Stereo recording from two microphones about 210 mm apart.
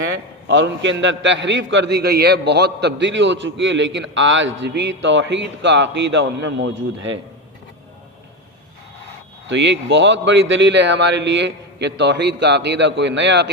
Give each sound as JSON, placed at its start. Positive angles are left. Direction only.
{"t": 0.4, "sound": "a man's voice", "side_deg": -60}
{"t": 9.5, "sound": "a man's voice", "side_deg": -60}